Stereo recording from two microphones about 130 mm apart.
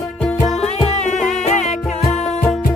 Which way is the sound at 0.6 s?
55° left (ahead or behind).